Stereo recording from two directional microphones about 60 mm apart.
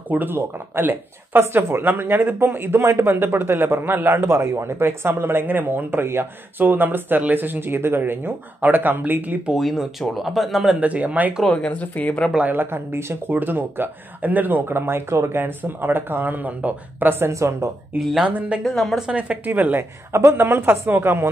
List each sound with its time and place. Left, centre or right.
0.1 s a man's voice: right
3.2 s a man's voice: right
9.5 s speech: centre
10.8 s speech: right
11.4 s speech: centre
12.4 s a man's voice: right
17.3 s a woman's voice: right
17.9 s speech: right
18.6 s speech: centre
19.1 s speech: right
19.8 s a man's voice: right